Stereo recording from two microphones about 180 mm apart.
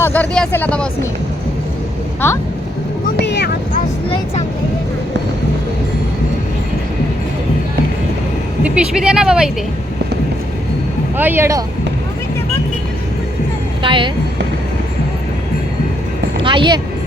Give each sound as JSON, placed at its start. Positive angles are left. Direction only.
{"t": 0.0, "sound": "speech", "side_deg": 10}
{"t": 2.2, "sound": "speech", "side_deg": 15}
{"t": 3.2, "sound": "vehicle", "side_deg": 70}
{"t": 8.6, "sound": "speech", "side_deg": -5}
{"t": 11.2, "sound": "speech", "side_deg": -10}
{"t": 13.8, "sound": "speech", "side_deg": -30}
{"t": 16.4, "sound": "speech", "side_deg": -25}